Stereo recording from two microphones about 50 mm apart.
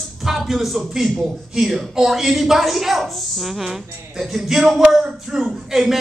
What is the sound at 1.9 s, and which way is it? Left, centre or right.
Speech, centre.